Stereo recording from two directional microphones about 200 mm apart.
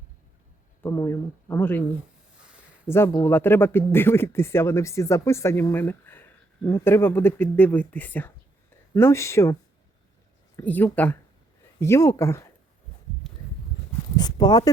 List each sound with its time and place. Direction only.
0.8 s speech: 15° left (ahead or behind)
2.8 s speech: 10° left (ahead or behind)
10.6 s speech: 10° left (ahead or behind)
13.2 s a sound: centre (ahead or behind)
14.2 s speech: 20° left (ahead or behind)